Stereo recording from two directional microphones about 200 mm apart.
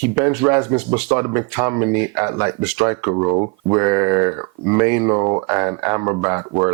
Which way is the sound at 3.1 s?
25° right (ahead or behind).